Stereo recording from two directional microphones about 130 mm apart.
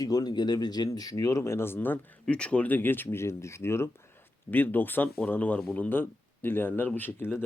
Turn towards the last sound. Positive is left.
turn(degrees=15)  # may be behind; listen again after turning